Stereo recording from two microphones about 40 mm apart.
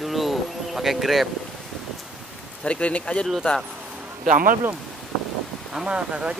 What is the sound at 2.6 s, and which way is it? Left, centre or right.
Speech, left.